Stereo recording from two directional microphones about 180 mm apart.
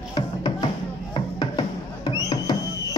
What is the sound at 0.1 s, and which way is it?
Music, 25° left (ahead or behind).